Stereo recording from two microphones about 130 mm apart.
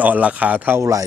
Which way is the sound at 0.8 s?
25° right (ahead or behind).